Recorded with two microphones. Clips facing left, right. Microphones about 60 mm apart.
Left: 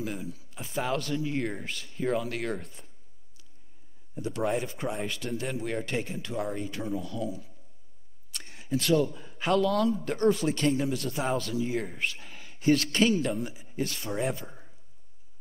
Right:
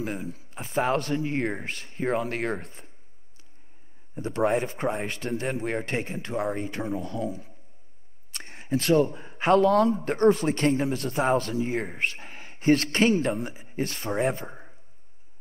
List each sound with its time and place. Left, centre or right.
0.0 s speech: right
4.1 s speech: right